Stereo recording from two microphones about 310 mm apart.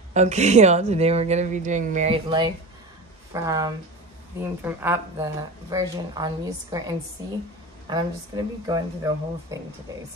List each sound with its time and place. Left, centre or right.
0.1 s speech: right
7.9 s speech: centre